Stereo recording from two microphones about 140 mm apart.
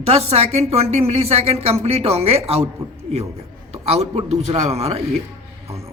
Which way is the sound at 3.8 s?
50° right (ahead or behind).